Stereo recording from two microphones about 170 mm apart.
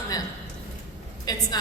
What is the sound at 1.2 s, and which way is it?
Speech, 20° left (ahead or behind).